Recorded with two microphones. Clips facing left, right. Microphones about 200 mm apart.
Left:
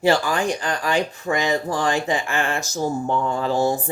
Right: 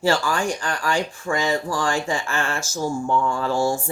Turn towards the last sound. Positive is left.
turn(degrees=20)  # may be behind; listen again after turning